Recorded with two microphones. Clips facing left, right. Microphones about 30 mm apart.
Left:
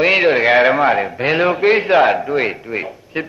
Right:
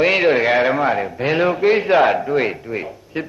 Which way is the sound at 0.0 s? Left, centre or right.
Centre.